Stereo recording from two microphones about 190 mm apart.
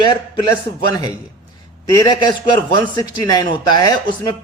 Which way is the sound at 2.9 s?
20° left (ahead or behind).